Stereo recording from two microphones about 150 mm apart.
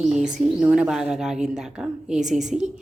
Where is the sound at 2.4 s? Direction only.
50° right (ahead or behind).